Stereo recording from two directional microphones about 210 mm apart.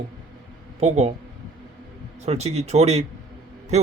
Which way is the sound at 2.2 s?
30° right (ahead or behind).